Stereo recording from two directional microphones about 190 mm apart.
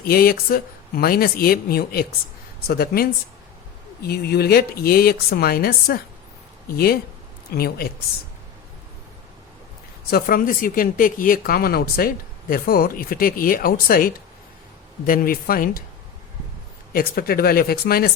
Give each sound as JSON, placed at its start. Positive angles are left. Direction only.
{"t": 0.0, "sound": "speech", "side_deg": 50}
{"t": 10.1, "sound": "speech", "side_deg": 50}
{"t": 16.9, "sound": "speech", "side_deg": 50}